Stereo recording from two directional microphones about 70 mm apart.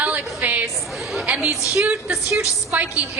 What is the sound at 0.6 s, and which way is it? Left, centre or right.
A woman's voice, centre.